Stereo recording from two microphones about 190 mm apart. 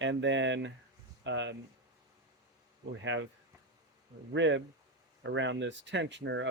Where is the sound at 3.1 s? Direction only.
70° right (ahead or behind).